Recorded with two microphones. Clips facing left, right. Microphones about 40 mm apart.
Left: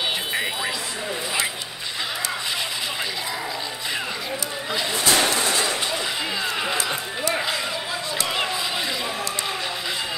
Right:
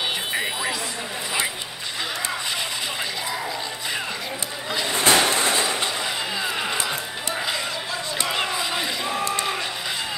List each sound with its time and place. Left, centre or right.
0.3 s music: centre
4.9 s a sound: centre
6.4 s music: centre